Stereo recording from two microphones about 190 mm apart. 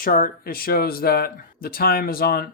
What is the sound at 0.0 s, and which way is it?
Speech, 45° left (ahead or behind).